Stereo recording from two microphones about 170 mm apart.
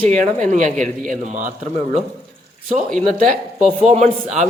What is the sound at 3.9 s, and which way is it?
Speech, 45° right (ahead or behind).